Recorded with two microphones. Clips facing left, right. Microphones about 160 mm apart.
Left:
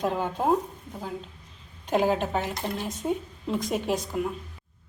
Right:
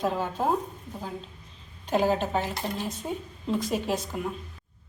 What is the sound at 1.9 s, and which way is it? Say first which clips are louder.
A woman's voice: even; 15° left (ahead or behind).